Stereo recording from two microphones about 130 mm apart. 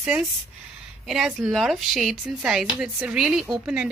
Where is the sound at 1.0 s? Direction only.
5° right (ahead or behind).